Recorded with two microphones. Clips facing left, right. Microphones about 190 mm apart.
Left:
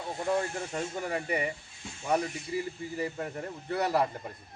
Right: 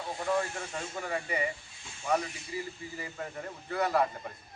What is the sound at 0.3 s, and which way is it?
Speech, 35° left (ahead or behind).